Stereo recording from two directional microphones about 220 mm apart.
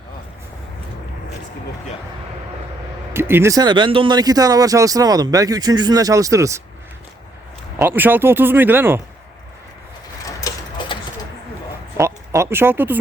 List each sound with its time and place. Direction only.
3.1 s speech: 10° right (ahead or behind)
7.8 s speech: 10° right (ahead or behind)
10.2 s a sound: 20° left (ahead or behind)
11.9 s speech: 10° right (ahead or behind)